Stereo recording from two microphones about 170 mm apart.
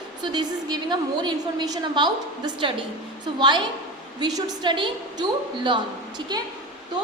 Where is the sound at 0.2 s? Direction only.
25° right (ahead or behind).